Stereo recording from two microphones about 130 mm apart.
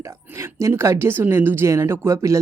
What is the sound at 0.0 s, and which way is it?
A woman's voice, 20° right (ahead or behind).